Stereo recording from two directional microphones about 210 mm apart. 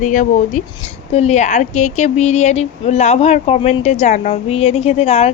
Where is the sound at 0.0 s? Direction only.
40° left (ahead or behind).